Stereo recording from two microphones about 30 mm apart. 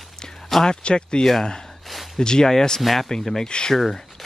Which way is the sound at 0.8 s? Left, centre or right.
Left.